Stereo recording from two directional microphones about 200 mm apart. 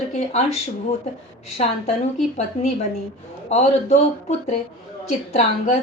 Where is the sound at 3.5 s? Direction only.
35° left (ahead or behind).